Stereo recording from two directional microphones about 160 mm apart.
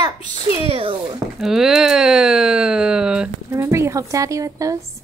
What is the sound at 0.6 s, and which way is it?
Speech, 35° right (ahead or behind).